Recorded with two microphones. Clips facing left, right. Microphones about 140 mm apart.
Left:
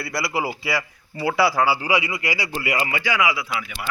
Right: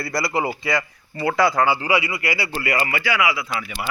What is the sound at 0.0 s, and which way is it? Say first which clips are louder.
A man's voice: right 2 dB; centre (ahead or behind).